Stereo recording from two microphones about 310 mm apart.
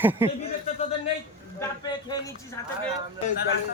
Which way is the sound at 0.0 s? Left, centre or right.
Centre.